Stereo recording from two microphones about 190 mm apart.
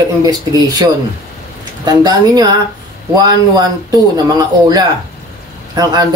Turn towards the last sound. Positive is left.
turn(degrees=-20)  # may be behind; listen again after turning